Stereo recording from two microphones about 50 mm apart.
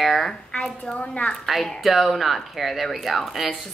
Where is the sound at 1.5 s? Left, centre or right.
Centre.